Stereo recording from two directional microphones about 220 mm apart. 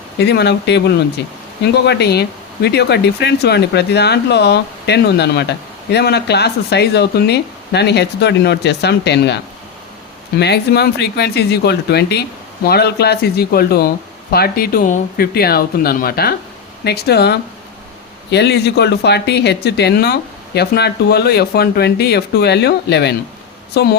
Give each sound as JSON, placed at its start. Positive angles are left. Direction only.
{"t": 0.2, "sound": "speech", "side_deg": 50}